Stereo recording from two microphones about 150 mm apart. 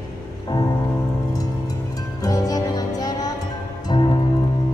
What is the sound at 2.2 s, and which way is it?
Music, 25° left (ahead or behind).